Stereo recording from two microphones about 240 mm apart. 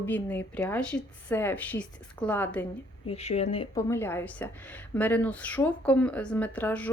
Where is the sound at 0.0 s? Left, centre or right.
Centre.